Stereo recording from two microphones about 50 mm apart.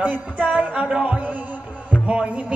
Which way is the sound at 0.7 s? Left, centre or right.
Right.